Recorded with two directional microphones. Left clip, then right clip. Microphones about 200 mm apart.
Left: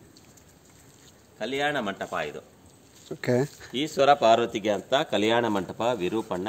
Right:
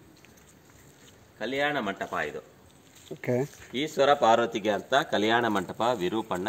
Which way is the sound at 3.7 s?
55° left (ahead or behind).